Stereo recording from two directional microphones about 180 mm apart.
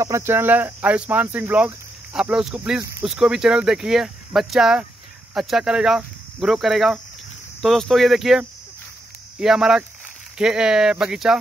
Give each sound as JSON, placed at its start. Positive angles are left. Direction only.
{"t": 0.0, "sound": "speech", "side_deg": -15}